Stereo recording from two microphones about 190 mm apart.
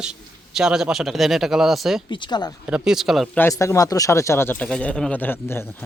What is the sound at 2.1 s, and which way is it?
Speech, 25° left (ahead or behind).